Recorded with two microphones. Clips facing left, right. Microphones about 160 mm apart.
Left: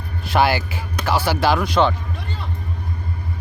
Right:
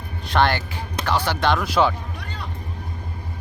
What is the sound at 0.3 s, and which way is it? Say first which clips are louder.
Speech: left 2 dB; 5° left (ahead or behind).